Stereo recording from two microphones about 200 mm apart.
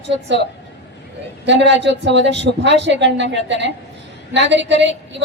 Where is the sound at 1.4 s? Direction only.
60° right (ahead or behind).